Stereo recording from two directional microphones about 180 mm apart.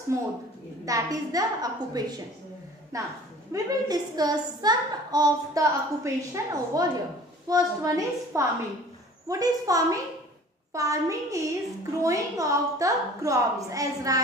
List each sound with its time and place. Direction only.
0.1 s a woman's voice: 15° right (ahead or behind)